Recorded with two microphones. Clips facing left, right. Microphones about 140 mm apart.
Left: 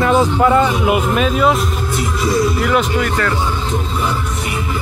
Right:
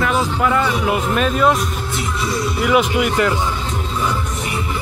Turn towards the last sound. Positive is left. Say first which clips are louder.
# right 1 dB
turn(degrees=-15)  # may be behind; listen again after turning